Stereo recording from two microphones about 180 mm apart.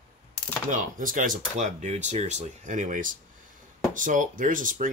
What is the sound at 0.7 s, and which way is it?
Speech, 50° right (ahead or behind).